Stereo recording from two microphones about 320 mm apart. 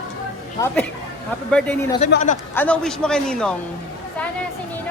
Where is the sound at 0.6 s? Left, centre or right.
Centre.